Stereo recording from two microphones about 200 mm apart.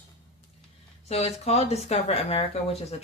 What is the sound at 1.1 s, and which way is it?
Speech, 30° left (ahead or behind).